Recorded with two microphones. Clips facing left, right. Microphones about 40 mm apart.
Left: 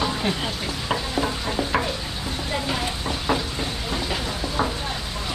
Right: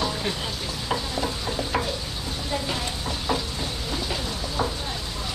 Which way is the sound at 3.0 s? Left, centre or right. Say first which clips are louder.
Left 2 dB; left.